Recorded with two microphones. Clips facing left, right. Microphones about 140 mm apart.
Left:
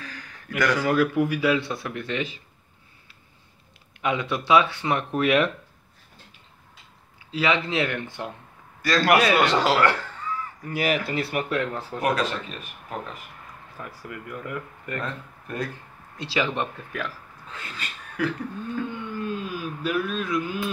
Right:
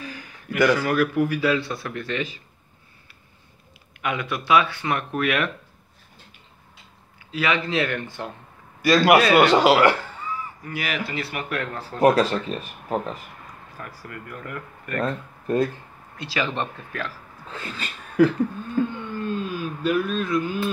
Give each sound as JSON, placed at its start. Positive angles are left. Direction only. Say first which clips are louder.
{"t": 0.0, "sound": "a sound", "louder": "right 4 dB", "side_deg": -10}
{"t": 0.7, "sound": "speech", "louder": "even", "side_deg": 20}
{"t": 4.0, "sound": "speech", "louder": "left 1 dB", "side_deg": 25}
{"t": 7.2, "sound": "speech", "louder": "even", "side_deg": 30}
{"t": 8.8, "sound": "a man's voice", "louder": "right 4 dB", "side_deg": -15}
{"t": 10.7, "sound": "speech", "louder": "left 4 dB", "side_deg": 40}
{"t": 11.4, "sound": "speech", "louder": "left 2 dB", "side_deg": 20}
{"t": 12.0, "sound": "speech", "louder": "right 8 dB", "side_deg": -35}
{"t": 13.7, "sound": "speech", "louder": "left 1 dB", "side_deg": 20}
{"t": 15.4, "sound": "speech", "louder": "right 10 dB", "side_deg": -30}
{"t": 16.3, "sound": "speech", "louder": "left 1 dB", "side_deg": 15}
{"t": 17.5, "sound": "speech", "louder": "right 4 dB", "side_deg": -30}
{"t": 18.8, "sound": "a sound", "louder": "right 8 dB", "side_deg": -35}
{"t": 19.1, "sound": "a sound", "louder": "right 3 dB", "side_deg": 10}